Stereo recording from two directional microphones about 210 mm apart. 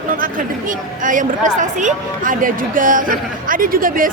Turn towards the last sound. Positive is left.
turn(degrees=-40)  # may be behind; listen again after turning